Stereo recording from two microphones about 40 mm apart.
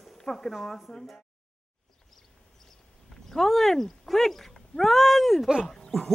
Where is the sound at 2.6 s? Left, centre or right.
Centre.